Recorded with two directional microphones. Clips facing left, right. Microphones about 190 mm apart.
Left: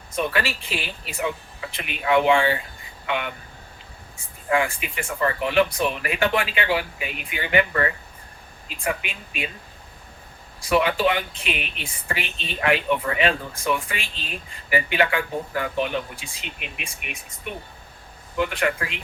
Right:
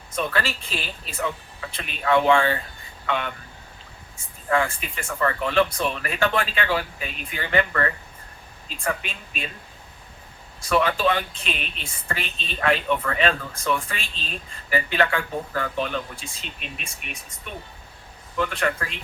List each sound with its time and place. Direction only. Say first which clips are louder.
0.3 s speech: left 1 dB; 15° left (ahead or behind)
4.4 s speech: left 1 dB; 15° left (ahead or behind)
10.6 s speech: left 1 dB; 15° left (ahead or behind)